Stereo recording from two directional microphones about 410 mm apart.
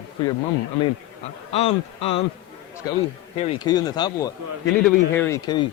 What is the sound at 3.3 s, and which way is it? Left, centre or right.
Speech, centre.